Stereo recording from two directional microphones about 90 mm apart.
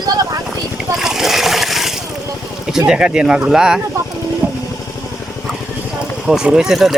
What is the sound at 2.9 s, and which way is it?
Speech, 10° right (ahead or behind).